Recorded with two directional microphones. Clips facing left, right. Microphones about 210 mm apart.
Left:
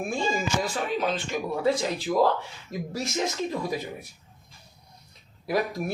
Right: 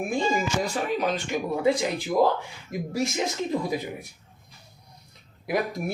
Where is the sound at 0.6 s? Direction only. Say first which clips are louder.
Right 1 dB; 15° right (ahead or behind).